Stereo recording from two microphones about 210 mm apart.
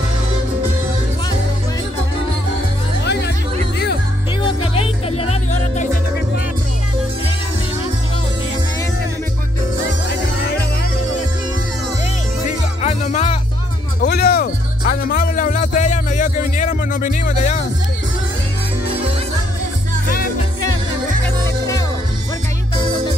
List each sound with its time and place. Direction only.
4.5 s music: 25° left (ahead or behind)
12.4 s music: 35° left (ahead or behind)
14.0 s music: 50° left (ahead or behind)